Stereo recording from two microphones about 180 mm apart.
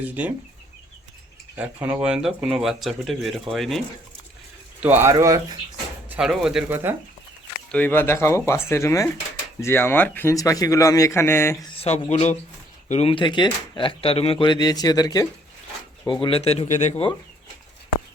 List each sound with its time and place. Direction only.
0.0 s speech: 10° right (ahead or behind)
1.5 s speech: 10° right (ahead or behind)
4.8 s speech: 10° right (ahead or behind)
6.1 s speech: 5° right (ahead or behind)
7.7 s a man's voice: 10° left (ahead or behind)
11.8 s speech: 35° left (ahead or behind)